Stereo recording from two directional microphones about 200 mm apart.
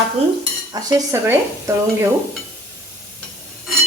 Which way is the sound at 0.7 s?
20° right (ahead or behind).